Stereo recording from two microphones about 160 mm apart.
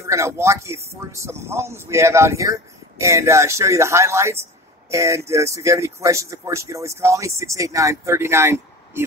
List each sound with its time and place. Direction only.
0.0 s speech: 20° right (ahead or behind)